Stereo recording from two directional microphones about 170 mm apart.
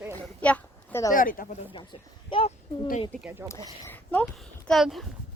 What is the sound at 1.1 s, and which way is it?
Speech, 55° left (ahead or behind).